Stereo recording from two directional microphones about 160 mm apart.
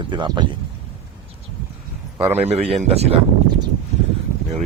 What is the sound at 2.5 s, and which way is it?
Speech, 40° right (ahead or behind).